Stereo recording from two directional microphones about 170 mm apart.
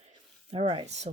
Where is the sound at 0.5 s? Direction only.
35° right (ahead or behind).